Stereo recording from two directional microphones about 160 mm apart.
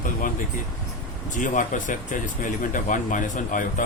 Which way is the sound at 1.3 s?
55° left (ahead or behind).